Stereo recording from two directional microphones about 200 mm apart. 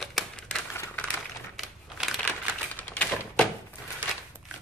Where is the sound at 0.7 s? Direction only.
10° left (ahead or behind).